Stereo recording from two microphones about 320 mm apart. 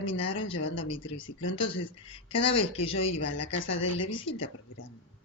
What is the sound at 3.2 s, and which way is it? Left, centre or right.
Speech, left.